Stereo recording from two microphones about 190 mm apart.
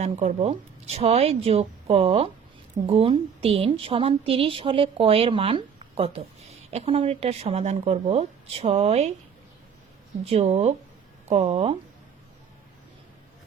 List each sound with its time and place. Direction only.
0.0 s a woman's voice: 35° right (ahead or behind)
10.2 s speech: 35° right (ahead or behind)